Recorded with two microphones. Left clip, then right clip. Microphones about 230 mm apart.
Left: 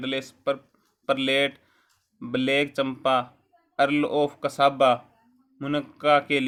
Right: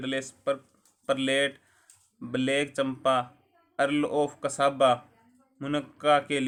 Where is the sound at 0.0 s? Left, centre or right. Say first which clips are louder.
Left 3 dB; left.